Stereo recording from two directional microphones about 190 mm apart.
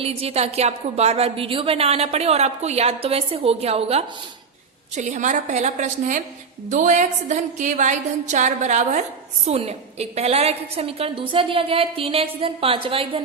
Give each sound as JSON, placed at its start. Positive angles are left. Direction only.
{"t": 0.0, "sound": "a woman's voice", "side_deg": -30}